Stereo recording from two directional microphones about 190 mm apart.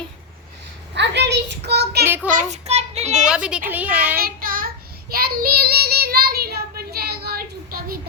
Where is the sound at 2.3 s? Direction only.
40° right (ahead or behind).